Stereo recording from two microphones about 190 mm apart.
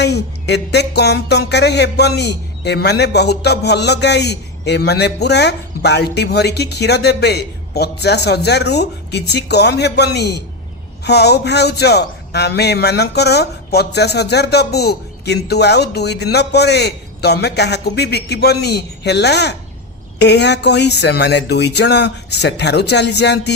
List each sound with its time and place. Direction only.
0.0 s music: 65° left (ahead or behind)